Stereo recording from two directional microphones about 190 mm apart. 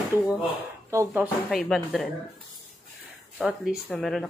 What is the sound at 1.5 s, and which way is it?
Speech, centre (ahead or behind).